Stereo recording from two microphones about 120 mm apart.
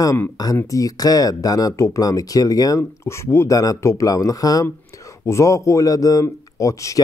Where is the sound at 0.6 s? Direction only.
25° left (ahead or behind).